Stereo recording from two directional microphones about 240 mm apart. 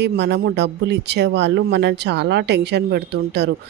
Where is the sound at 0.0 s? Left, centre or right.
Right.